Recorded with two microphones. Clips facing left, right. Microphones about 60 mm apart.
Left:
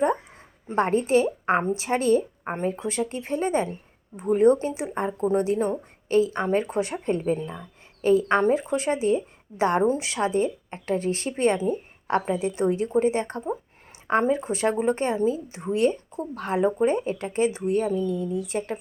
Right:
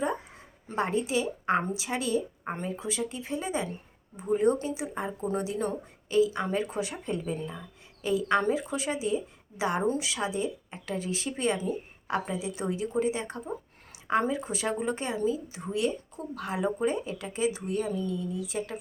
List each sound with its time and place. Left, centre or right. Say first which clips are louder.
0.8 s speech: left 7 dB; left
2.4 s a sound: left 5 dB; left
2.6 s speech: left 7 dB; left
8.4 s speech: left 6 dB; left
9.8 s speech: left 6 dB; left